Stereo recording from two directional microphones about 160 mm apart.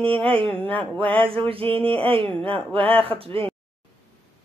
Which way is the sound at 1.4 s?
35° right (ahead or behind).